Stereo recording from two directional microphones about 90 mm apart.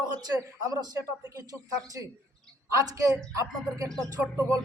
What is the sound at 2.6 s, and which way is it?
Speech, 40° right (ahead or behind).